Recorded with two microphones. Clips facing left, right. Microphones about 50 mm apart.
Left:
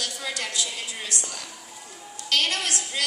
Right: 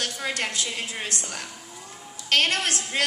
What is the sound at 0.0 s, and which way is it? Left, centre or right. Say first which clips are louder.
A woman's voice: right 3 dB; right.